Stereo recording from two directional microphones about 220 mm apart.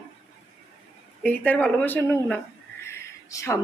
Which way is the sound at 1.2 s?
5° left (ahead or behind).